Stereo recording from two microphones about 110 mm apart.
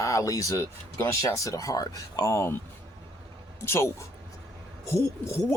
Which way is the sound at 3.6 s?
25° left (ahead or behind).